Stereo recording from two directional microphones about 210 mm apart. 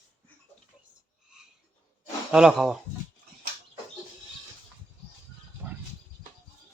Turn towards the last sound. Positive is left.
turn(degrees=-10)  # may be behind; listen again after turning